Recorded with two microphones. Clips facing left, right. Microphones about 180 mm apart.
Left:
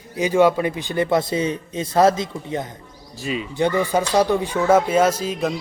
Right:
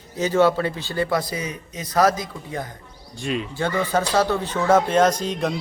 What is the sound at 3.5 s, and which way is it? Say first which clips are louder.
A man's voice: left 5 dB; 15° left (ahead or behind).